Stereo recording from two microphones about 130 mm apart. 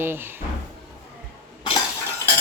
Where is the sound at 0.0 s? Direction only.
15° right (ahead or behind).